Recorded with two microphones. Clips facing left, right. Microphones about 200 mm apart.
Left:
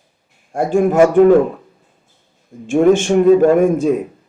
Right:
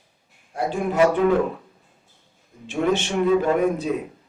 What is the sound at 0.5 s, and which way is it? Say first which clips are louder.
Speech: left 9 dB; 50° left (ahead or behind).